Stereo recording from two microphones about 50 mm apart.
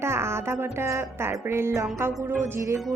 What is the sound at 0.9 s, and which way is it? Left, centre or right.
Music, right.